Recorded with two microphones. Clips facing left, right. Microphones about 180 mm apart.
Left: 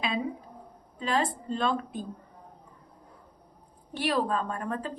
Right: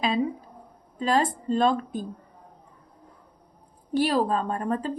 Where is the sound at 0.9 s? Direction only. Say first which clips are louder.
Right 5 dB; 40° right (ahead or behind).